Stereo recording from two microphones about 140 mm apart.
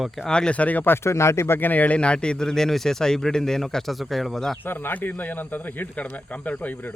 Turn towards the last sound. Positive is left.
turn(degrees=10)  # may be behind; listen again after turning